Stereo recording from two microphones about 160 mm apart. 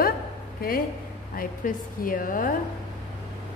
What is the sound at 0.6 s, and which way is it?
Speech, 65° left (ahead or behind).